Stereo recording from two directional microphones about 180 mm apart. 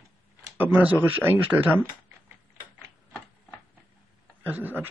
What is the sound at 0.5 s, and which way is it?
Speech, 10° right (ahead or behind).